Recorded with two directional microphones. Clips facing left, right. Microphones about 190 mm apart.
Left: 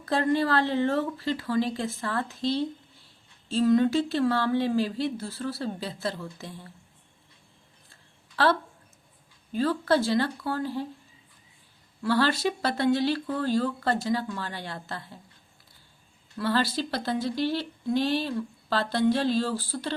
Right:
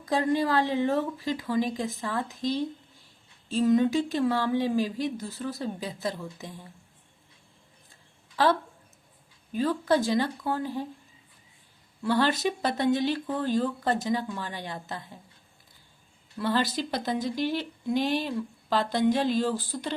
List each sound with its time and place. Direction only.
0.0 s speech: 15° right (ahead or behind)
9.6 s speech: 15° right (ahead or behind)
12.0 s speech: 20° right (ahead or behind)
16.4 s speech: 20° right (ahead or behind)